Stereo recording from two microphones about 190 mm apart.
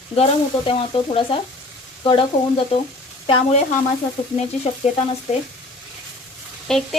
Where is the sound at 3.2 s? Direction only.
25° left (ahead or behind).